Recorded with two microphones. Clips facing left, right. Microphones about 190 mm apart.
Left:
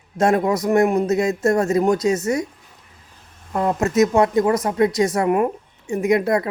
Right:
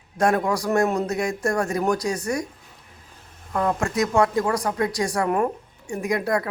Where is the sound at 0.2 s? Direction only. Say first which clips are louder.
Left 3 dB; 25° left (ahead or behind).